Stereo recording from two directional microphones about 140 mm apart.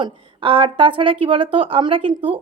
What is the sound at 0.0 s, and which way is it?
A woman's voice, 40° right (ahead or behind).